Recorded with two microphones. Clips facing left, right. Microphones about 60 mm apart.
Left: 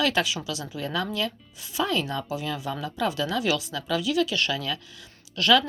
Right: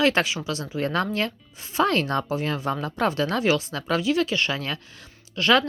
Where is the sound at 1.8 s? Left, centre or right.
Right.